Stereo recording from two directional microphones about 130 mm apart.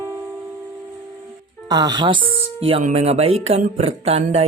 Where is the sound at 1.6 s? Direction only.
30° right (ahead or behind).